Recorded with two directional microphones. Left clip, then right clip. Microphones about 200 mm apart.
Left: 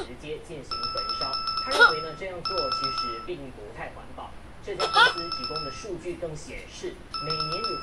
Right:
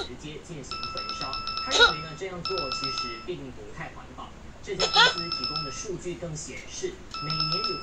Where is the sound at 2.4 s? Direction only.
20° left (ahead or behind).